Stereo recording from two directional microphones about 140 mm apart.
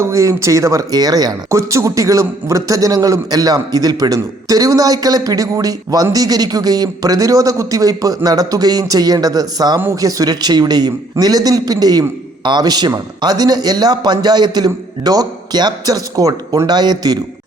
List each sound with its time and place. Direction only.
0.0 s speech: 20° right (ahead or behind)